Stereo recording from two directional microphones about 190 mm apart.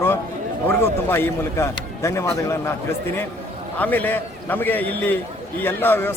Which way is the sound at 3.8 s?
10° left (ahead or behind).